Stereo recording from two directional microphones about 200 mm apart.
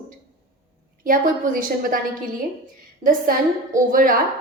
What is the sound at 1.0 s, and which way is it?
Speech, 45° right (ahead or behind).